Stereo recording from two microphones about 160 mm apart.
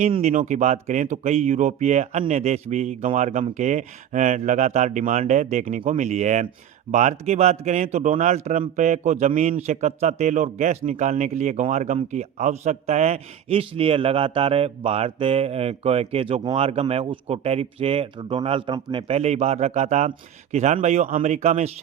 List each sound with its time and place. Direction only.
0.2 s a man's voice: 50° right (ahead or behind)